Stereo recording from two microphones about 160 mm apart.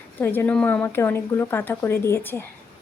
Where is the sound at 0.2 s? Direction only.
10° left (ahead or behind).